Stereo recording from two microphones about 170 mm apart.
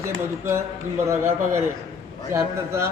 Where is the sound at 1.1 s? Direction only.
15° right (ahead or behind).